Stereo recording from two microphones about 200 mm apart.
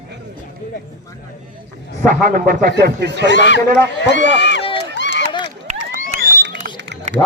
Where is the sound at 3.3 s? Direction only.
65° left (ahead or behind).